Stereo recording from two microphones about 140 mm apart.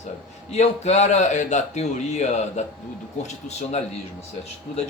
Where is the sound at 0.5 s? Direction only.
55° left (ahead or behind).